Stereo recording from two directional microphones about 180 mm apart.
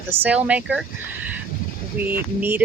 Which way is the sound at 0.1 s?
10° right (ahead or behind).